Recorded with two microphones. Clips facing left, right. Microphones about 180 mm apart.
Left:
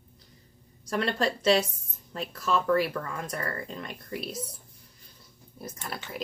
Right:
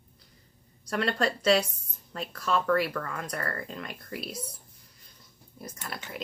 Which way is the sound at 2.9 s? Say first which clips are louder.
Even; 15° left (ahead or behind).